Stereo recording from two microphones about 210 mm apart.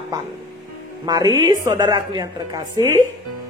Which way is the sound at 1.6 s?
15° right (ahead or behind).